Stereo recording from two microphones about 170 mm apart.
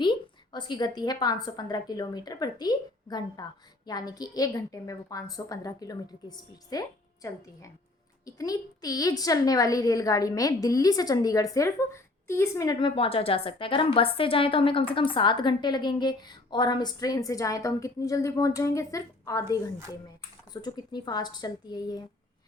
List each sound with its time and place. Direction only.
0.0 s a woman's voice: 25° left (ahead or behind)
13.0 s a woman's voice: 35° left (ahead or behind)